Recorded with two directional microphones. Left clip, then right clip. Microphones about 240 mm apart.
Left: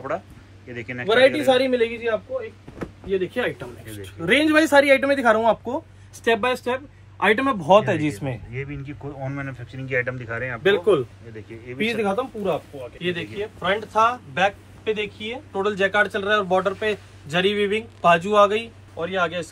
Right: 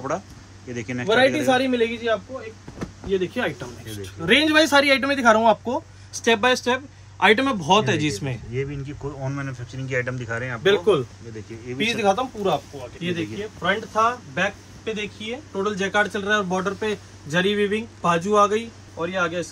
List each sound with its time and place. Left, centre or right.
0.1 s speech: centre
8.5 s speech: centre
13.6 s speech: left